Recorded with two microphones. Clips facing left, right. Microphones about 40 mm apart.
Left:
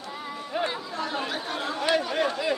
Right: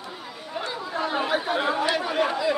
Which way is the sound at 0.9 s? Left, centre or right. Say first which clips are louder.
Right 5 dB; centre.